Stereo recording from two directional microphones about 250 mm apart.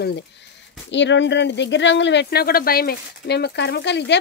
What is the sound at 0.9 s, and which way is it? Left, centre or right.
Speech, left.